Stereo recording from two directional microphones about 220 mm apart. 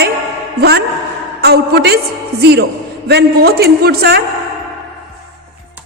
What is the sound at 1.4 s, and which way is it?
A woman's voice, 45° right (ahead or behind).